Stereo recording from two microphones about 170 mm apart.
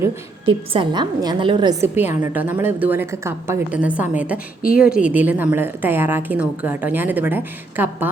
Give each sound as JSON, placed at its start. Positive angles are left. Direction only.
{"t": 0.4, "sound": "a woman's voice", "side_deg": -30}
{"t": 2.2, "sound": "a woman's voice", "side_deg": -10}